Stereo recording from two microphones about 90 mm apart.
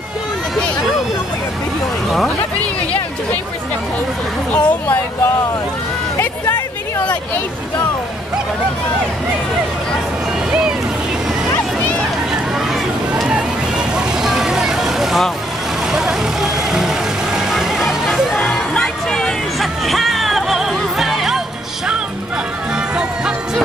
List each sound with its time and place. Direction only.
4.5 s speech: 20° left (ahead or behind)
13.3 s vehicle: 10° right (ahead or behind)
18.5 s music: 10° left (ahead or behind)
22.9 s music: 10° right (ahead or behind)